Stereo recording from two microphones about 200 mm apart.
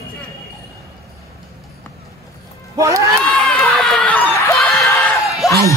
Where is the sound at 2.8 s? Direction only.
15° right (ahead or behind).